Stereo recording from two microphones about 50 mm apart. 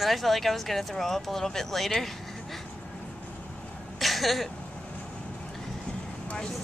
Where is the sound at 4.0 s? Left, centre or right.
Centre.